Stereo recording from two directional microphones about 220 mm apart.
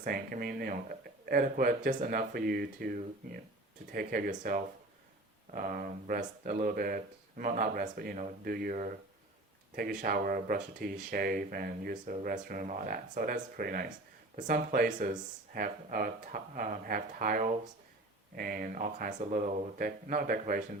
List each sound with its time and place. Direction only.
0.0 s speech: 40° right (ahead or behind)
10.0 s speech: 40° right (ahead or behind)